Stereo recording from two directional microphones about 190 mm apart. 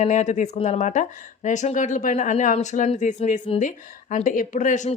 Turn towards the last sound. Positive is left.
turn(degrees=40)  # may be behind; listen again after turning